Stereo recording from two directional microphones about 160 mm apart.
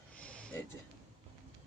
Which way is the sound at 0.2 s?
5° left (ahead or behind).